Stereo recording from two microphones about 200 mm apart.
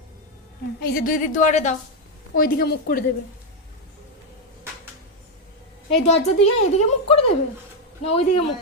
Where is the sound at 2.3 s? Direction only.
45° left (ahead or behind).